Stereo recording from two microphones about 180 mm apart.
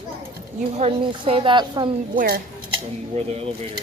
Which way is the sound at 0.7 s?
35° right (ahead or behind).